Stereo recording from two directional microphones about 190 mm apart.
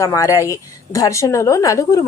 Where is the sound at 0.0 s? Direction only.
15° left (ahead or behind).